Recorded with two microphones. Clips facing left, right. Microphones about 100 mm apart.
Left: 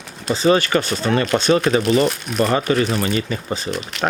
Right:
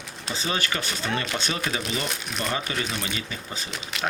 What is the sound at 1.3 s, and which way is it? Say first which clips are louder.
Speech: left 13 dB; 75° left (ahead or behind).